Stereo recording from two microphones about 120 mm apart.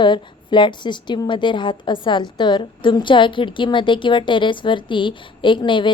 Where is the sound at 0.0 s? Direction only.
40° left (ahead or behind).